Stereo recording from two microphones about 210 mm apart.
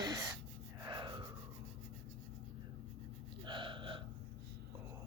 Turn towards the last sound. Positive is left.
turn(degrees=-25)  # may be behind; listen again after turning